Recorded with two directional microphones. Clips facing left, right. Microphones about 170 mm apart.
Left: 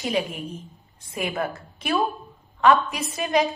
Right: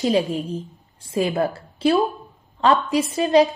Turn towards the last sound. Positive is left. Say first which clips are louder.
# right 7 dB
turn(degrees=-30)  # may be behind; listen again after turning